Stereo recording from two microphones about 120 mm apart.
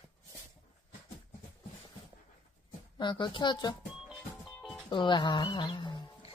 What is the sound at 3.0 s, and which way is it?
Speech, 40° left (ahead or behind).